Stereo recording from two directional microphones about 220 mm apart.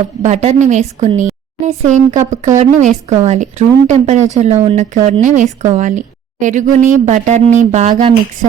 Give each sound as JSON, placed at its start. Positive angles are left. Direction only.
{"t": 0.2, "sound": "speech", "side_deg": -30}